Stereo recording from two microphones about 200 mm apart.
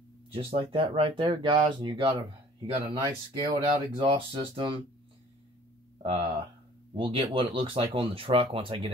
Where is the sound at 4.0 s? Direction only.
25° right (ahead or behind).